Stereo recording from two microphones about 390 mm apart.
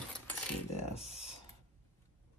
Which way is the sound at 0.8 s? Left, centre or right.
Centre.